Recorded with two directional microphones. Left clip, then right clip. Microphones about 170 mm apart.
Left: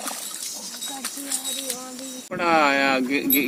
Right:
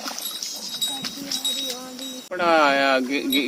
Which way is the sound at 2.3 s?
35° left (ahead or behind).